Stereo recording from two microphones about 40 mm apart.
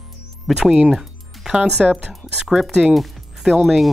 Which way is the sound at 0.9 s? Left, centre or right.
Centre.